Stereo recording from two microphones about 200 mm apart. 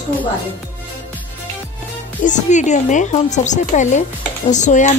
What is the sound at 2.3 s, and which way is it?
Speech, 35° left (ahead or behind).